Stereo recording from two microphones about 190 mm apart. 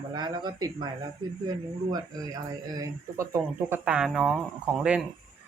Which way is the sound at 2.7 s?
15° right (ahead or behind).